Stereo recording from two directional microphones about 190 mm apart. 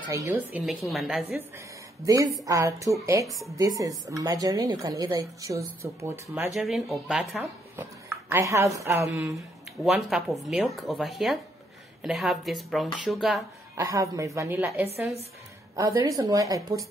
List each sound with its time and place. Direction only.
0.3 s speech: 5° right (ahead or behind)
2.0 s a woman's voice: 20° right (ahead or behind)
3.3 s speech: centre (ahead or behind)
3.5 s a woman's voice: 20° right (ahead or behind); by 7.4 s centre (ahead or behind)
7.7 s speech: 15° right (ahead or behind)
9.8 s speech: centre (ahead or behind)
13.7 s a woman's voice: 15° right (ahead or behind)